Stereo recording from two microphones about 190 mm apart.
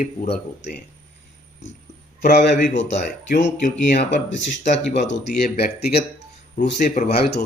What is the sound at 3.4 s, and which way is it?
Speech, 40° left (ahead or behind).